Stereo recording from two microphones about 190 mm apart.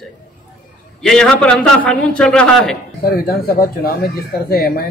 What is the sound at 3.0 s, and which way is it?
Speech, 50° left (ahead or behind).